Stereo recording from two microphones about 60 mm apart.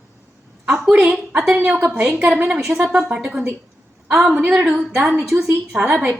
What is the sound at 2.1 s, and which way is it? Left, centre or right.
Speech, right.